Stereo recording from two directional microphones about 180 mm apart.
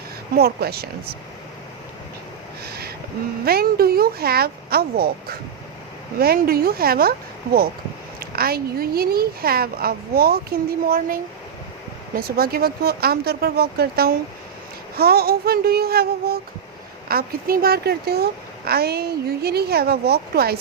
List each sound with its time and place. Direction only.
0.3 s speech: 60° right (ahead or behind)
2.6 s a sound: 60° right (ahead or behind)
3.4 s speech: 60° right (ahead or behind)
6.1 s speech: 55° right (ahead or behind)
8.2 s speech: 55° right (ahead or behind)